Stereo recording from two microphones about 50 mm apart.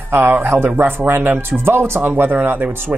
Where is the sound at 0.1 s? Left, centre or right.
Right.